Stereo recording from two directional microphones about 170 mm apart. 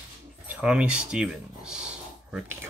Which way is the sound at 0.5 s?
5° right (ahead or behind).